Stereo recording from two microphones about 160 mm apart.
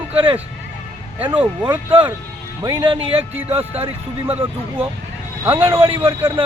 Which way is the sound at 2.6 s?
30° right (ahead or behind).